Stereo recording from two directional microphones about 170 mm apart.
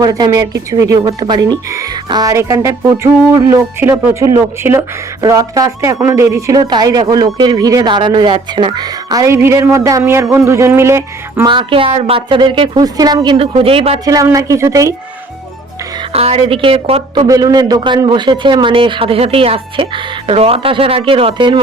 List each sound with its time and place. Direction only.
0.0 s speech: 20° right (ahead or behind)
11.4 s a man's voice: 30° right (ahead or behind)
14.0 s speech: 20° right (ahead or behind)
16.1 s a man's voice: 35° right (ahead or behind)
17.2 s a man's voice: 20° right (ahead or behind)